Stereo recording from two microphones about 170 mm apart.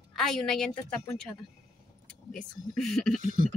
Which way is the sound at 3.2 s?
50° right (ahead or behind).